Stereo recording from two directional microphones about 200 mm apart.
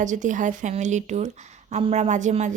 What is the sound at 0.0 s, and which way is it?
A woman's voice, 40° right (ahead or behind).